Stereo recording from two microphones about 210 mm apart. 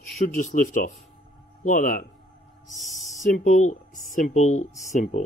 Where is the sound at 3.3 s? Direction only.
35° left (ahead or behind).